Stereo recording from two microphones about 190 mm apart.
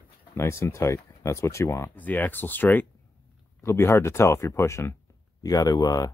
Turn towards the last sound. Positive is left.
turn(degrees=20)  # may be behind; listen again after turning